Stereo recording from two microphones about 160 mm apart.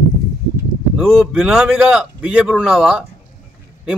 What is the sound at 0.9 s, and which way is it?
Speech, 5° right (ahead or behind).